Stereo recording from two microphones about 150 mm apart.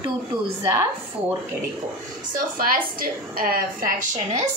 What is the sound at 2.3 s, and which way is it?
A woman's voice, 70° right (ahead or behind).